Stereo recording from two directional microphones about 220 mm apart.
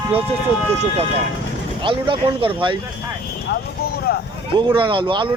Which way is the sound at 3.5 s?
45° left (ahead or behind).